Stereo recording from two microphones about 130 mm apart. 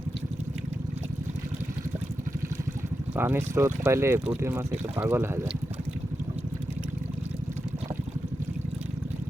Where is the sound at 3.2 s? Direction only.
15° right (ahead or behind).